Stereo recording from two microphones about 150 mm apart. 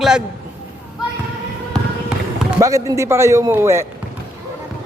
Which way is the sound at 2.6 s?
20° right (ahead or behind).